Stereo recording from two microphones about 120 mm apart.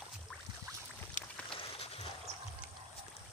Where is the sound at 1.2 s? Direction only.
90° left.